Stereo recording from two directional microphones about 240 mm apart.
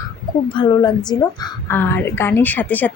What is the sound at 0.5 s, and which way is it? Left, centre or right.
A woman's voice, centre.